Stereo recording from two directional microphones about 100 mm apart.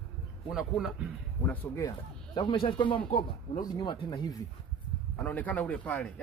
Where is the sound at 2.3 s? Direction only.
55° left (ahead or behind).